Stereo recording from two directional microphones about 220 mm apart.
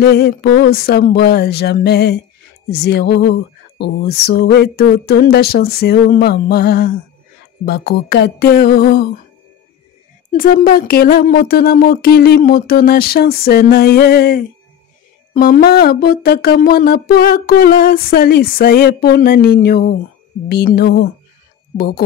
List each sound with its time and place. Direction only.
0.0 s speech: 45° left (ahead or behind)
10.3 s speech: 40° left (ahead or behind)